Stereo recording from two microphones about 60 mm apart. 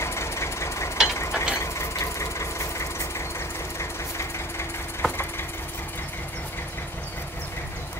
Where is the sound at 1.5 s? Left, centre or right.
Left.